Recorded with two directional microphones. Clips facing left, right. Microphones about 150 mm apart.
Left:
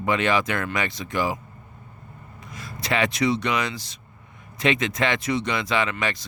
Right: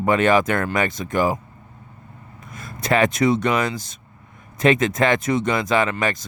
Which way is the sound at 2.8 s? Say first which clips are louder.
Right 5 dB; 45° right (ahead or behind).